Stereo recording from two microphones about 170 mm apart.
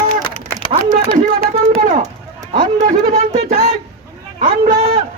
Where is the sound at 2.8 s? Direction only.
45° right (ahead or behind).